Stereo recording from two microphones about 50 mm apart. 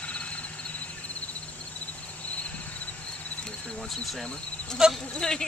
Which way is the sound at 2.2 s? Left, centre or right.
Left.